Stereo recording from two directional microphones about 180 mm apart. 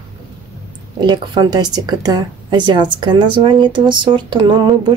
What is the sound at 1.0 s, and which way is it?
Speech, 25° right (ahead or behind).